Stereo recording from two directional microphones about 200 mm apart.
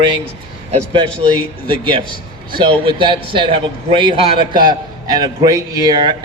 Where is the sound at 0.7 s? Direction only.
25° right (ahead or behind).